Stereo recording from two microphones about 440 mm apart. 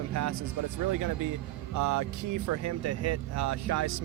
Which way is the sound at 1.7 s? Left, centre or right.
Right.